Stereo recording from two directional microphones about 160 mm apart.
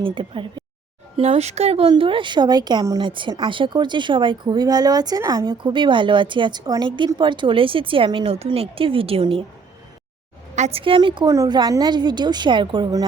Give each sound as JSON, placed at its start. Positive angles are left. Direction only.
{"t": 0.0, "sound": "speech", "side_deg": -30}
{"t": 10.5, "sound": "a woman's voice", "side_deg": -40}